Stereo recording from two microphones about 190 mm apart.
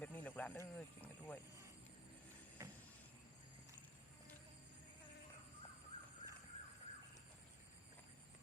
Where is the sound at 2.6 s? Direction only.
15° right (ahead or behind).